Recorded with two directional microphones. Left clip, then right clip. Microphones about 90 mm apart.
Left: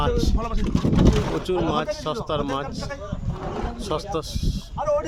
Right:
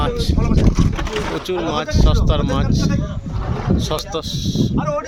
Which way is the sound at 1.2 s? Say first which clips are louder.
Right 3 dB; 25° left (ahead or behind).